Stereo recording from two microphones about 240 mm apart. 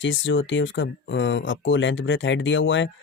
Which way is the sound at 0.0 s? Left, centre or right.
Left.